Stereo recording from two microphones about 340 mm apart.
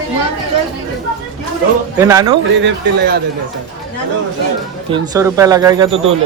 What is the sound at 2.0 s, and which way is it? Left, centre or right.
Speech, centre.